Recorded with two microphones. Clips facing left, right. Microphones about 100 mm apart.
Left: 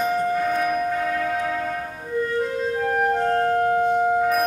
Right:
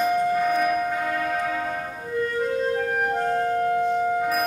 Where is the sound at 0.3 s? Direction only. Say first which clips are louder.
Even; 5° right (ahead or behind).